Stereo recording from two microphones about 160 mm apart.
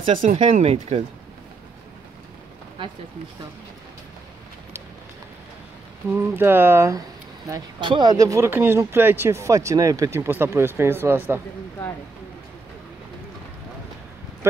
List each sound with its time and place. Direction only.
0.2 s speech: 40° right (ahead or behind)
6.0 s speech: 15° right (ahead or behind)
7.5 s speech: 30° right (ahead or behind)
14.4 s speech: 15° right (ahead or behind)